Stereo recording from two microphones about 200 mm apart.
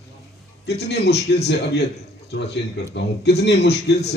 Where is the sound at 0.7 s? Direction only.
55° left (ahead or behind).